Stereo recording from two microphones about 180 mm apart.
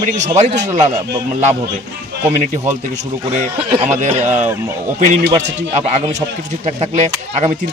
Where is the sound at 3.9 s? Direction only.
40° right (ahead or behind).